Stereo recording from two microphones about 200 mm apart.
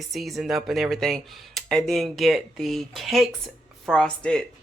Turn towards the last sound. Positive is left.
turn(degrees=5)  # may be behind; listen again after turning